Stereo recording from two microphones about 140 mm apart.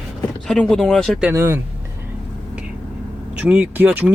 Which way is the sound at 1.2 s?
15° right (ahead or behind).